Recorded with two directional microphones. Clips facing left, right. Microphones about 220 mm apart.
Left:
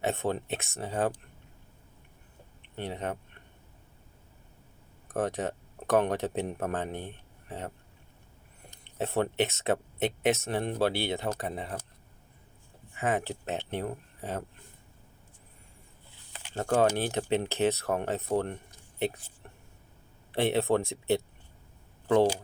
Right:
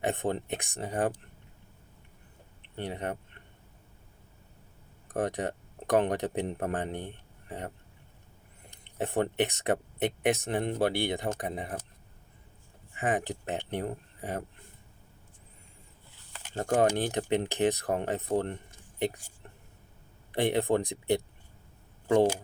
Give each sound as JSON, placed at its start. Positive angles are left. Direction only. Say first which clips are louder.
{"t": 0.0, "sound": "speech", "louder": "even", "side_deg": -15}
{"t": 2.6, "sound": "a sound", "louder": "even", "side_deg": -15}
{"t": 5.1, "sound": "speech", "louder": "even", "side_deg": -15}
{"t": 8.8, "sound": "speech", "louder": "even", "side_deg": -15}
{"t": 13.0, "sound": "speech", "louder": "even", "side_deg": -15}
{"t": 16.6, "sound": "speech", "louder": "even", "side_deg": -15}
{"t": 20.3, "sound": "speech", "louder": "even", "side_deg": -15}